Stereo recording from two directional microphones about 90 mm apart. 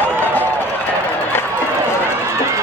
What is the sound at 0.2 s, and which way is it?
Run, 20° left (ahead or behind).